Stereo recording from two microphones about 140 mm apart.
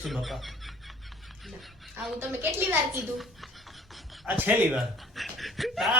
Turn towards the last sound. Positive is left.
turn(degrees=0)  # may be behind; listen again after turning